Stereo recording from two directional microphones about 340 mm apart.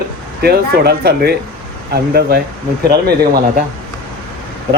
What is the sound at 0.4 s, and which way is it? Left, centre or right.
Speech, right.